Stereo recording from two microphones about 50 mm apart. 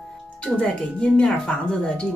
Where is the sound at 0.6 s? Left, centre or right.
Centre.